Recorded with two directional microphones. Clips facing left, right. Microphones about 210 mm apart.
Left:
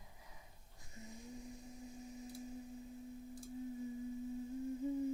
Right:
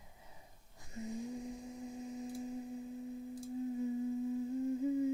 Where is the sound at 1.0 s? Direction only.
90° right.